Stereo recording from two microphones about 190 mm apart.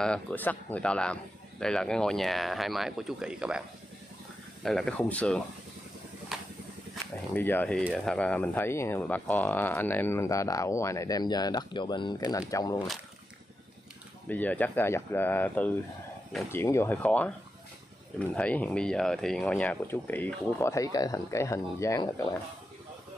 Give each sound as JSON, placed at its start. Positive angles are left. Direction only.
{"t": 0.0, "sound": "a man's voice", "side_deg": 5}
{"t": 4.6, "sound": "a man's voice", "side_deg": 5}
{"t": 6.3, "sound": "vehicle", "side_deg": 0}
{"t": 7.3, "sound": "speech", "side_deg": 10}
{"t": 14.3, "sound": "speech", "side_deg": 10}
{"t": 18.3, "sound": "speech", "side_deg": 5}